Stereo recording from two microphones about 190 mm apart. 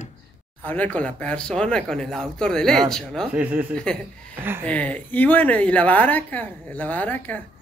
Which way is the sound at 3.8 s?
5° left (ahead or behind).